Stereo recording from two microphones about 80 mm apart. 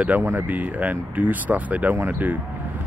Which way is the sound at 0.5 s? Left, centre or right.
Centre.